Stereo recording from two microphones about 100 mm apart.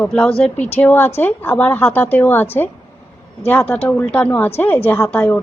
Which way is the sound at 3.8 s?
15° left (ahead or behind).